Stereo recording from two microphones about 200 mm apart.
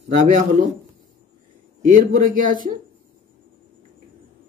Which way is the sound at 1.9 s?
45° right (ahead or behind).